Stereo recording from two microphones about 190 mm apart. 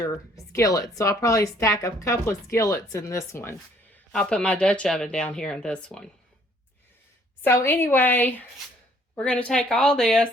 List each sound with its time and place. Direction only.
0.0 s speech: 15° left (ahead or behind)
3.9 s speech: 5° left (ahead or behind)
7.4 s speech: 10° left (ahead or behind)